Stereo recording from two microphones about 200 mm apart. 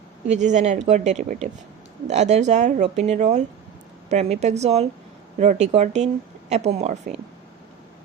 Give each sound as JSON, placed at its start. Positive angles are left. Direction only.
{"t": 0.3, "sound": "speech", "side_deg": -35}